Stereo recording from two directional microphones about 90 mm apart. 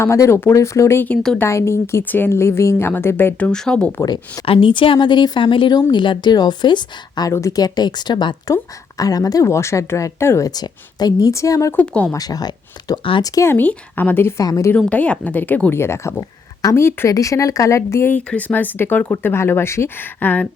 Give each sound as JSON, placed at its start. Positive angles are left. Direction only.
{"t": 0.0, "sound": "speech", "side_deg": 30}
{"t": 3.3, "sound": "speech", "side_deg": 10}
{"t": 4.0, "sound": "speech", "side_deg": 45}
{"t": 4.4, "sound": "a woman's voice", "side_deg": 80}
{"t": 7.3, "sound": "speech", "side_deg": 35}
{"t": 9.0, "sound": "speech", "side_deg": 40}
{"t": 10.4, "sound": "speech", "side_deg": 45}
{"t": 11.3, "sound": "speech", "side_deg": 35}
{"t": 11.8, "sound": "speech", "side_deg": 15}
{"t": 12.1, "sound": "speech", "side_deg": 45}
{"t": 13.5, "sound": "speech", "side_deg": 20}
{"t": 14.8, "sound": "speech", "side_deg": 15}
{"t": 18.1, "sound": "speech", "side_deg": 15}